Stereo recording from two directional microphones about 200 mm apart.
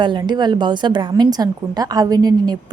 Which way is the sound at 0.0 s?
20° right (ahead or behind).